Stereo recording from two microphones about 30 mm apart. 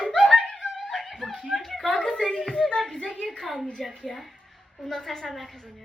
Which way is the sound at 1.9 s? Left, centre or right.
Left.